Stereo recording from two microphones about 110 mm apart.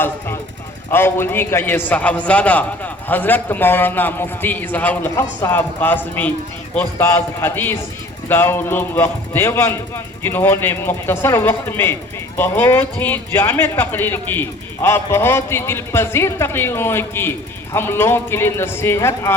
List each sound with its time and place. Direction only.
0.9 s a man's voice: 20° left (ahead or behind)
5.1 s speech: 30° left (ahead or behind)
5.5 s a man's voice: 15° left (ahead or behind)